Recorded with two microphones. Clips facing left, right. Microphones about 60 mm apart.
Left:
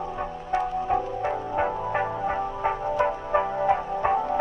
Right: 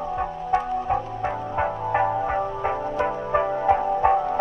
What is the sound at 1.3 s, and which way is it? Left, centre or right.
Music, centre.